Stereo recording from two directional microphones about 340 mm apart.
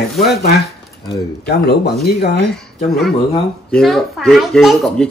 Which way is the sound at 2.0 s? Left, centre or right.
Left.